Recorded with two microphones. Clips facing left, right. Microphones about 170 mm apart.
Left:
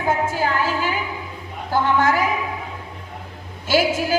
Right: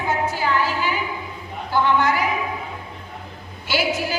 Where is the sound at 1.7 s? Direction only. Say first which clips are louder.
Left 1 dB; 45° left (ahead or behind).